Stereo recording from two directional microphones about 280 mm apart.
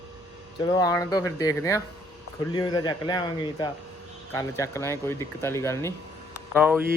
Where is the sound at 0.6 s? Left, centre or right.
Centre.